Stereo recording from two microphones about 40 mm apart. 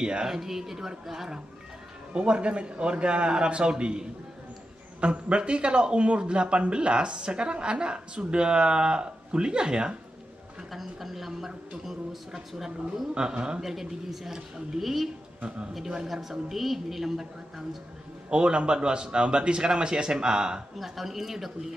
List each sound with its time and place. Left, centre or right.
0.0 s a man's voice: right
0.3 s a woman's voice: centre
2.1 s a man's voice: right
10.7 s a woman's voice: centre
13.1 s a man's voice: right
13.6 s a woman's voice: centre
16.1 s a woman's voice: centre
18.3 s a man's voice: right
20.7 s a woman's voice: centre